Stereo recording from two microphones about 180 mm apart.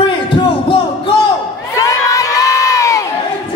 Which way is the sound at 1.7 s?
20° left (ahead or behind).